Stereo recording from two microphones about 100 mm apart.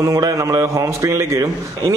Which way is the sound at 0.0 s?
35° right (ahead or behind).